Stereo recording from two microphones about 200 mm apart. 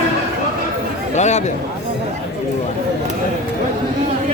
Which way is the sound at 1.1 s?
35° left (ahead or behind).